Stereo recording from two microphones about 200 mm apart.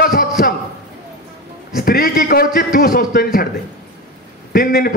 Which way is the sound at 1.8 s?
45° left (ahead or behind).